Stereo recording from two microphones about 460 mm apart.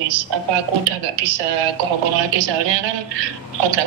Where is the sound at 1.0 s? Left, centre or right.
Right.